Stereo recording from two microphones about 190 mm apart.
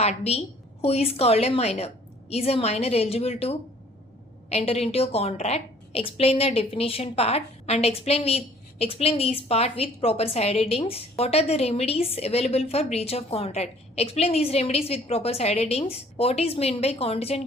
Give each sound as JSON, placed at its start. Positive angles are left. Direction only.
{"t": 0.0, "sound": "a woman's voice", "side_deg": 35}